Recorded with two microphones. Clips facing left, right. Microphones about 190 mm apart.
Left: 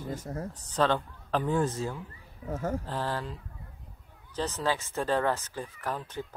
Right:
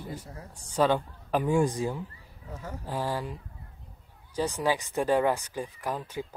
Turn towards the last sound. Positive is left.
turn(degrees=-10)  # may be behind; listen again after turning